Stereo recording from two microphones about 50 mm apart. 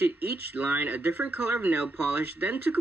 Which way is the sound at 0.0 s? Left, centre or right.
Right.